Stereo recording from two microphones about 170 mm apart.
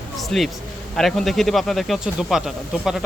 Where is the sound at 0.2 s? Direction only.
Centre (ahead or behind).